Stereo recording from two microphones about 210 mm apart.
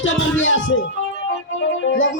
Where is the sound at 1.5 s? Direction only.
65° left (ahead or behind).